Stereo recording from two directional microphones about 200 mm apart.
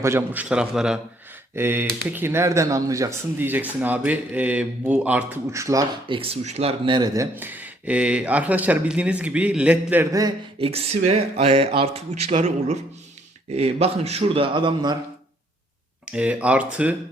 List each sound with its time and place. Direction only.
0.0 s a man's voice: 10° right (ahead or behind)
16.1 s speech: 5° right (ahead or behind)